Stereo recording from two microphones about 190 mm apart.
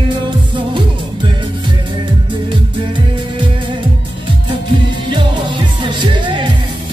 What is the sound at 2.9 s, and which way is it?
Music, 25° right (ahead or behind).